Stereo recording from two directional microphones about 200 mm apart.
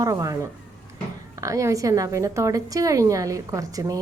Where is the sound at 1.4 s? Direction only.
15° right (ahead or behind).